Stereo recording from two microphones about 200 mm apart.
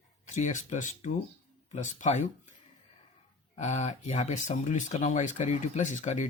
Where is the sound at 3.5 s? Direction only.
35° left (ahead or behind).